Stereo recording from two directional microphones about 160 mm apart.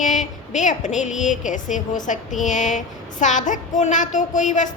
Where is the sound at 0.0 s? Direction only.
50° left (ahead or behind).